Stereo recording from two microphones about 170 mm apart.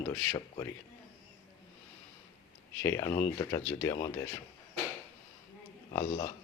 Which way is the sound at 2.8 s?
20° left (ahead or behind).